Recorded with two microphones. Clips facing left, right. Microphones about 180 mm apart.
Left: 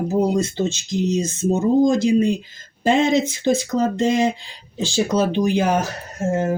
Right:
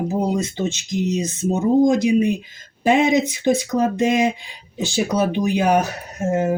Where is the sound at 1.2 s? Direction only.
25° left (ahead or behind).